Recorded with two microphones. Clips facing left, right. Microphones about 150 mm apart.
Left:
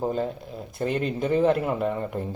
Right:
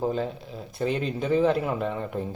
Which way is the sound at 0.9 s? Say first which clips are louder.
Left 1 dB; 50° left (ahead or behind).